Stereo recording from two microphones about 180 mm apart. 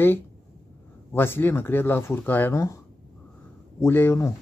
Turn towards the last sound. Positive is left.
turn(degrees=15)  # may be behind; listen again after turning